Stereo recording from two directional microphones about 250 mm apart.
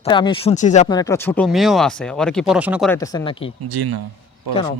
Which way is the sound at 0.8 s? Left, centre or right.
Centre.